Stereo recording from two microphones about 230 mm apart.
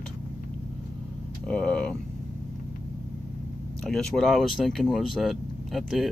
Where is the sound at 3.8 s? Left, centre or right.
Centre.